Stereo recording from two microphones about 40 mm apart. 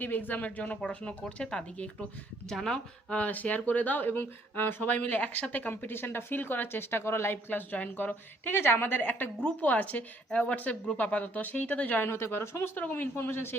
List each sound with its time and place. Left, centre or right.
0.0 s a woman's voice: left
1.5 s speech: left
2.5 s speech: centre
3.1 s a woman's voice: left
4.1 s a woman's voice: left
4.9 s speech: left
5.7 s a woman's voice: left
7.5 s a woman's voice: left
9.6 s speech: left
12.0 s a woman's voice: left
12.9 s a woman's voice: left